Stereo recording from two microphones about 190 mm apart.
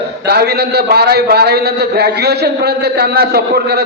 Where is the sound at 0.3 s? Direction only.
60° right (ahead or behind).